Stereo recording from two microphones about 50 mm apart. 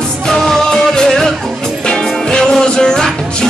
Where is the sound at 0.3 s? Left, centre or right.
Centre.